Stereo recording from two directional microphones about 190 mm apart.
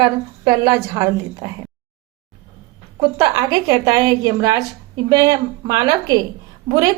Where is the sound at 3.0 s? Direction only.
20° right (ahead or behind).